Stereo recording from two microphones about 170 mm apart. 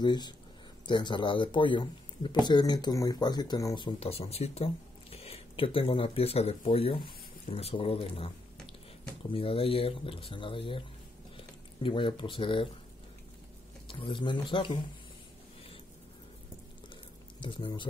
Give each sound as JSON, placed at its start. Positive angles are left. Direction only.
{"t": 0.0, "sound": "speech", "side_deg": 25}
{"t": 9.3, "sound": "speech", "side_deg": 30}
{"t": 13.8, "sound": "speech", "side_deg": 30}
{"t": 17.4, "sound": "speech", "side_deg": 30}